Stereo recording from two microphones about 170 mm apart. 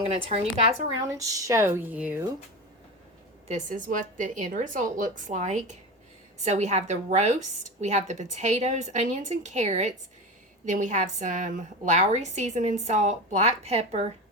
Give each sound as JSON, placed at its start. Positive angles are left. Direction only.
{"t": 0.0, "sound": "speech", "side_deg": -35}
{"t": 1.2, "sound": "speech", "side_deg": -20}
{"t": 3.5, "sound": "a woman's voice", "side_deg": -50}